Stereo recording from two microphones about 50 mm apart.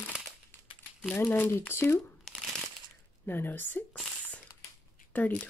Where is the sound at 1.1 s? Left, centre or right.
Left.